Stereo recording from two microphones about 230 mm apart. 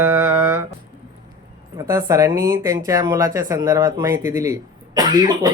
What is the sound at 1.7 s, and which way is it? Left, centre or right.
Speech, centre.